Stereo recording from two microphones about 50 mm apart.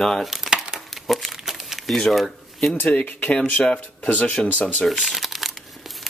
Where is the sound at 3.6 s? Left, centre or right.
Left.